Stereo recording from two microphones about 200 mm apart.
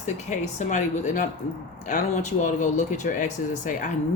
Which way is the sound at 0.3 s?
35° left (ahead or behind).